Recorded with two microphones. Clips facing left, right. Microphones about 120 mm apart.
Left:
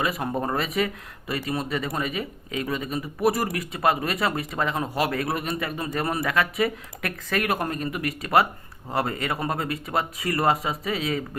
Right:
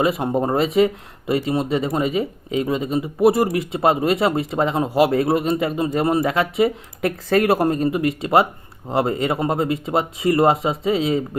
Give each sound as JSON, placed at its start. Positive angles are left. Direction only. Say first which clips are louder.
{"t": 0.0, "sound": "speech", "louder": "right 7 dB", "side_deg": -25}